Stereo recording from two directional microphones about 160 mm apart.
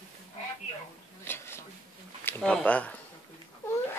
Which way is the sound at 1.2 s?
15° left (ahead or behind).